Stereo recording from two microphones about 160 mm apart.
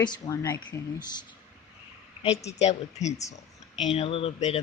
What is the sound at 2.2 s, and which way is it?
A woman's voice, 40° left (ahead or behind).